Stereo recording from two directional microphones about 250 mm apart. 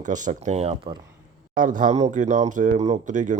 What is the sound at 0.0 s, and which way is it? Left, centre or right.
Speech, right.